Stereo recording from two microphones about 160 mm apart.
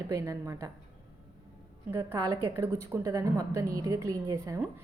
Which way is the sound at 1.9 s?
20° right (ahead or behind).